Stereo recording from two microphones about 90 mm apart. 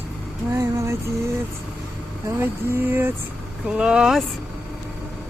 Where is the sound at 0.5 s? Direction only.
35° right (ahead or behind).